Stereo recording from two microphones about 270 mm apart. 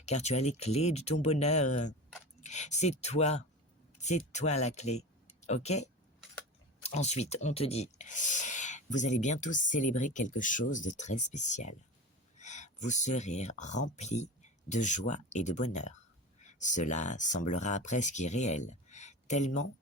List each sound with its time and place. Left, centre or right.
0.0 s speech: left